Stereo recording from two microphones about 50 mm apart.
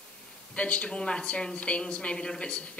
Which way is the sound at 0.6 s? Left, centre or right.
Left.